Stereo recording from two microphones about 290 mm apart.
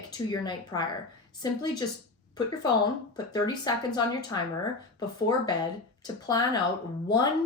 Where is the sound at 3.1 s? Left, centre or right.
Centre.